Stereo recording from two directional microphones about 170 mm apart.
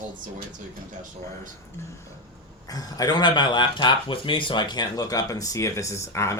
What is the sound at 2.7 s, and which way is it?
Speech, 20° left (ahead or behind).